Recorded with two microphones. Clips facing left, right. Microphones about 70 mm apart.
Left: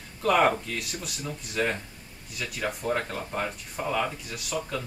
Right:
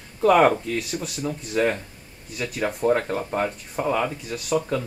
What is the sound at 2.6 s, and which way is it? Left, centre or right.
Speech, right.